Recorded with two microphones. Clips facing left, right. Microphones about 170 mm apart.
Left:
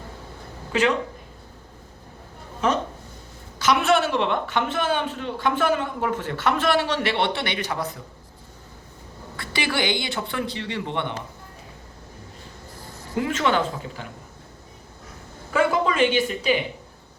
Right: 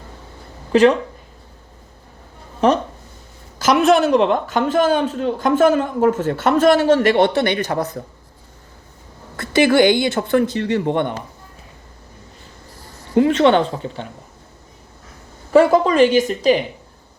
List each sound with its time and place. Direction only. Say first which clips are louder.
0.7 s speech: right 9 dB; 40° right (ahead or behind)
3.6 s speech: right 6 dB; 40° right (ahead or behind)
9.4 s speech: right 12 dB; 50° right (ahead or behind)
13.1 s speech: right 9 dB; 30° right (ahead or behind)
15.5 s speech: right 9 dB; 40° right (ahead or behind)